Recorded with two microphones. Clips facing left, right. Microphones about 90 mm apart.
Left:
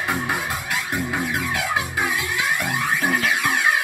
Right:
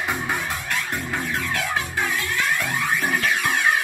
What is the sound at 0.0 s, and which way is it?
Music, 10° left (ahead or behind).